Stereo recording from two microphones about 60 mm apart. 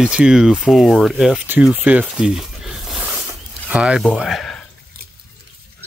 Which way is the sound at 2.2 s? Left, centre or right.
Centre.